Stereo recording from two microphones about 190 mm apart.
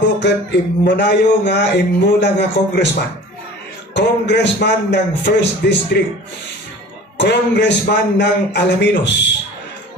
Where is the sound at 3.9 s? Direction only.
65° left (ahead or behind).